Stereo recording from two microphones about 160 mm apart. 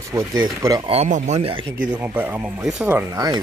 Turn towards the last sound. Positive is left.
turn(degrees=-25)  # may be behind; listen again after turning